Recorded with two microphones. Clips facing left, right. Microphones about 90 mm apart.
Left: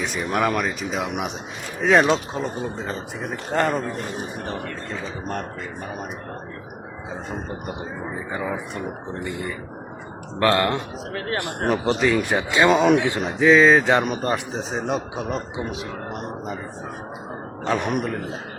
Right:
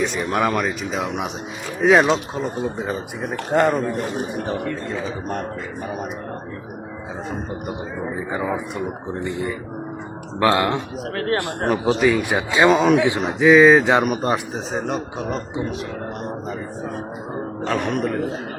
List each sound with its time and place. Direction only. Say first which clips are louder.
0.0 s speech: right 2 dB; centre (ahead or behind)
3.5 s speech: right 4 dB; 15° right (ahead or behind)
8.3 s speech: right 3 dB; 5° right (ahead or behind)
10.4 s speech: right 1 dB; 10° right (ahead or behind)
11.1 s speech: right 6 dB; 45° right (ahead or behind)
11.7 s speech: right 2 dB; centre (ahead or behind)
12.7 s speech: left 2 dB; centre (ahead or behind)
13.4 s speech: right 3 dB; 15° right (ahead or behind)
14.5 s speech: right 1 dB; centre (ahead or behind)
17.7 s speech: even; centre (ahead or behind)